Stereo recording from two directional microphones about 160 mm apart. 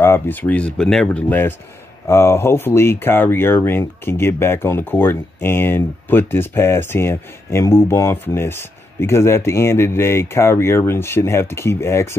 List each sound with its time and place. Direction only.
0.0 s speech: 15° left (ahead or behind)